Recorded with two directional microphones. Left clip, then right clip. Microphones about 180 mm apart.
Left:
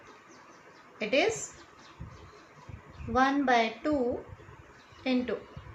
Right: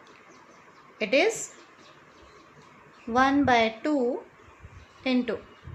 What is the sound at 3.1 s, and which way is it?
Speech, 50° right (ahead or behind).